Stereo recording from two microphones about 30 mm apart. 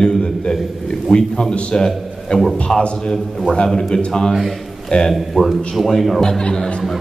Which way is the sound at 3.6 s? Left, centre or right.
Left.